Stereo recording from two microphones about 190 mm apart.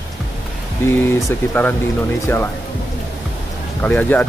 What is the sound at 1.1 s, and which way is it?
Speech, 10° left (ahead or behind).